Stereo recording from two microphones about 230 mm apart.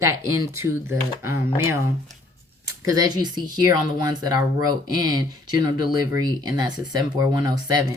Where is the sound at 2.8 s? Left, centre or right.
Centre.